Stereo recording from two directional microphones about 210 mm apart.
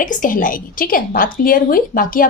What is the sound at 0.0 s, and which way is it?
A woman's voice, 40° left (ahead or behind).